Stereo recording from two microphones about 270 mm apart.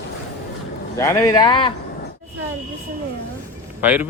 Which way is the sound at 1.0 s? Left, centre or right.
Centre.